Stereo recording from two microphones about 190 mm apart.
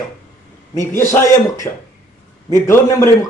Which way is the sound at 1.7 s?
20° left (ahead or behind).